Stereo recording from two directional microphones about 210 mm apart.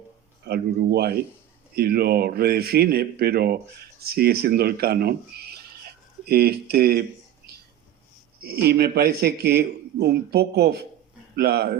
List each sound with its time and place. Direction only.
0.4 s speech: 50° right (ahead or behind)
8.4 s speech: 50° right (ahead or behind)